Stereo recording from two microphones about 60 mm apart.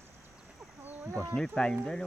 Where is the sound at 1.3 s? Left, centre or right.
Centre.